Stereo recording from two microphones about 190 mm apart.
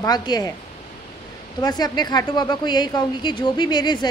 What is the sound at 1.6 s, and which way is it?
A woman's voice, 20° left (ahead or behind).